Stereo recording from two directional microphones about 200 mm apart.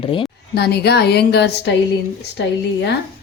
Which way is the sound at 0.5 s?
55° left (ahead or behind).